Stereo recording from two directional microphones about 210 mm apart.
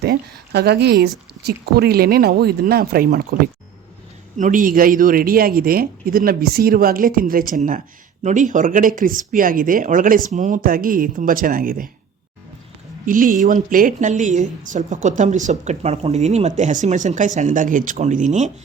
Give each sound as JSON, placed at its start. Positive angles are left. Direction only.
{"t": 0.0, "sound": "a woman's voice", "side_deg": -50}
{"t": 13.1, "sound": "a woman's voice", "side_deg": -40}